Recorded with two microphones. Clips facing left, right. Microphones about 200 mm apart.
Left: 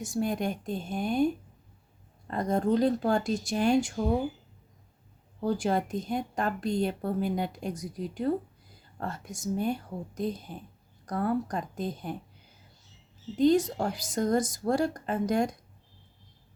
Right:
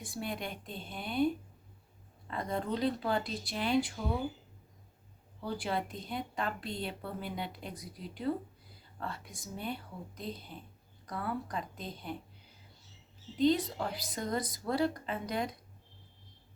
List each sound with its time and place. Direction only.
0.0 s a woman's voice: 45° left (ahead or behind)
5.4 s a woman's voice: 45° left (ahead or behind)
13.3 s a woman's voice: 45° left (ahead or behind)